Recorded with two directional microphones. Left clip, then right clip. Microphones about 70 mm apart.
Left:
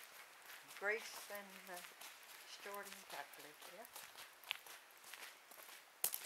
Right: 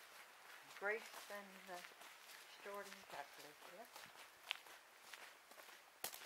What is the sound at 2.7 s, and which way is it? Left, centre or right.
Speech, left.